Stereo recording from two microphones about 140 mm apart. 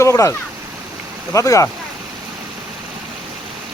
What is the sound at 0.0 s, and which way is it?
Speech, 20° left (ahead or behind).